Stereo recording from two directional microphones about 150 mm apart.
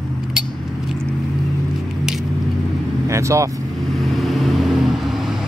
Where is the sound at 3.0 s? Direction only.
20° right (ahead or behind).